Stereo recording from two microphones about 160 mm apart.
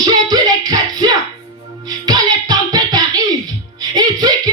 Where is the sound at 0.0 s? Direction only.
25° right (ahead or behind).